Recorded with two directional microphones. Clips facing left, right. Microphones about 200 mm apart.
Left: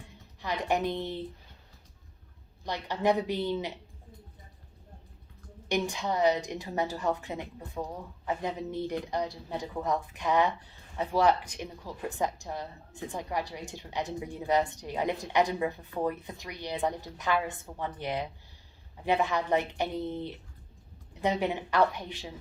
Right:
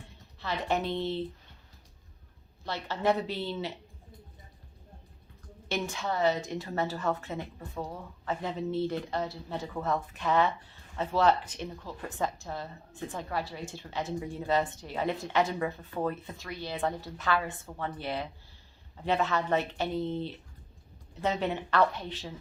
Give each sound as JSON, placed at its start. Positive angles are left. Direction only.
{"t": 0.3, "sound": "speech", "side_deg": 15}
{"t": 2.6, "sound": "speech", "side_deg": 15}
{"t": 5.6, "sound": "speech", "side_deg": 15}